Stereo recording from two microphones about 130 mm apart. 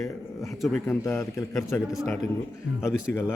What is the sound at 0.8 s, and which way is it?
Speech, 20° left (ahead or behind).